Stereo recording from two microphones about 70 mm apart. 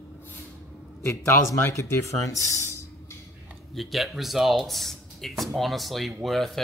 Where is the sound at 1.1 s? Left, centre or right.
Left.